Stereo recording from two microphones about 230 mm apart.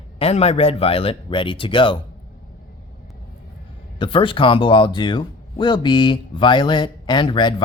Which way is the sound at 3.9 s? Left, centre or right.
Left.